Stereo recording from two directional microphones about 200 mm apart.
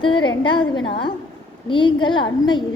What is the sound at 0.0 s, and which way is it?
A woman's voice, 25° left (ahead or behind).